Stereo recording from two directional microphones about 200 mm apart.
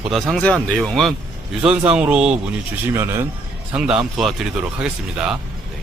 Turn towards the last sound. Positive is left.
turn(degrees=-5)  # may be behind; listen again after turning